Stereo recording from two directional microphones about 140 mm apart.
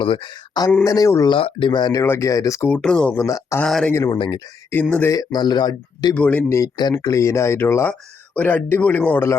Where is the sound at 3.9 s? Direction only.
20° left (ahead or behind).